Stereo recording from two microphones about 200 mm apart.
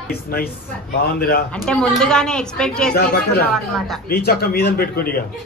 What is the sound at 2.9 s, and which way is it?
Speech, 50° left (ahead or behind).